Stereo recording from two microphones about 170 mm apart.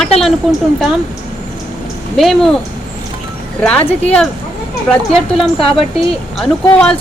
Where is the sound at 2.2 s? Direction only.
Centre (ahead or behind).